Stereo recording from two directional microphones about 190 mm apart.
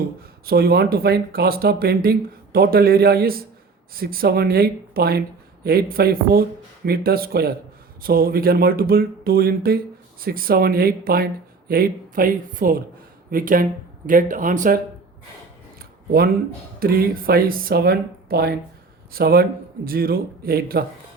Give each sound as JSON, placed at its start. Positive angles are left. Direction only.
{"t": 0.4, "sound": "speech", "side_deg": -55}
{"t": 16.8, "sound": "speech", "side_deg": -50}